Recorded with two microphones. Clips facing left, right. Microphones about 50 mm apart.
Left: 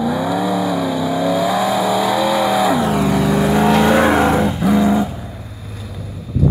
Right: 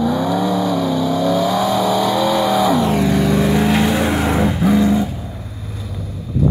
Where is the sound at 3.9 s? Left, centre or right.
Left.